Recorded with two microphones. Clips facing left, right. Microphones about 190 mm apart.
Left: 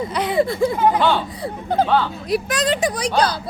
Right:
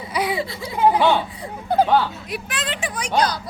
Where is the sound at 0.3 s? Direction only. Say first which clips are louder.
Left 10 dB; 50° left (ahead or behind).